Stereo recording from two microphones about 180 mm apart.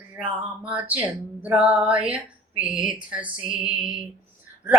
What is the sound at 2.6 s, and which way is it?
Music, 5° right (ahead or behind).